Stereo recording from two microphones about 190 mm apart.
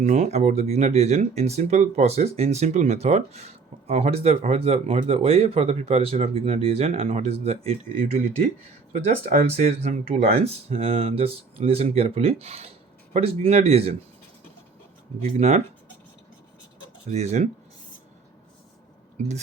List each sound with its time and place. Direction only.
0.0 s speech: 35° right (ahead or behind)
15.4 s speech: 35° right (ahead or behind)
17.1 s speech: 35° right (ahead or behind)